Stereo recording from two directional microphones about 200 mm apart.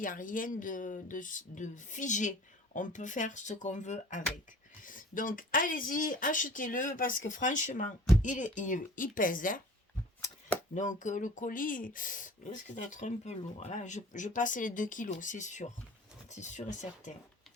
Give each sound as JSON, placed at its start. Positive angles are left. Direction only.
{"t": 0.0, "sound": "speech", "side_deg": 40}
{"t": 10.8, "sound": "speech", "side_deg": 40}